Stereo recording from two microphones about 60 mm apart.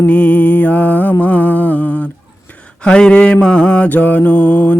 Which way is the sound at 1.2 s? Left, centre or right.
Left.